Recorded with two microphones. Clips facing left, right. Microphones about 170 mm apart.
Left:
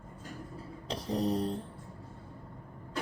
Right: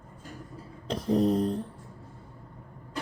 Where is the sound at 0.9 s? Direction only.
50° right (ahead or behind).